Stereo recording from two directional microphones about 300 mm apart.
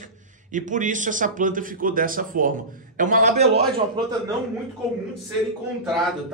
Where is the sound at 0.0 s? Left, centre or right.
Right.